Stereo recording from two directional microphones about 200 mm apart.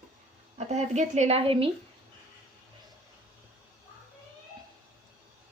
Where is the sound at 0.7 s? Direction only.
35° right (ahead or behind).